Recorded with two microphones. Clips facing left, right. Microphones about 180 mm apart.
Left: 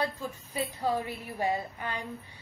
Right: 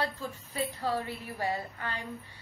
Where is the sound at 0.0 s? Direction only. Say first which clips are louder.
Left 2 dB; 15° left (ahead or behind).